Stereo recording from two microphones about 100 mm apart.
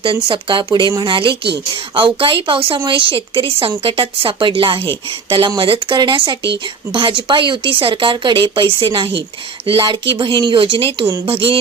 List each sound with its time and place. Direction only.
0.0 s speech: 60° right (ahead or behind)